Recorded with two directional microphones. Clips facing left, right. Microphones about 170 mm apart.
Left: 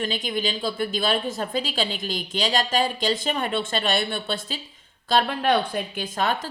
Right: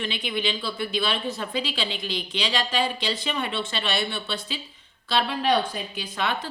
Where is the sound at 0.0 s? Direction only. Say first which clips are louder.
Left 2 dB; 40° left (ahead or behind).